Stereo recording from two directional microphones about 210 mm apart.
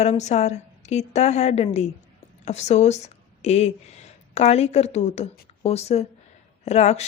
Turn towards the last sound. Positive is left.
turn(degrees=30)  # may be behind; listen again after turning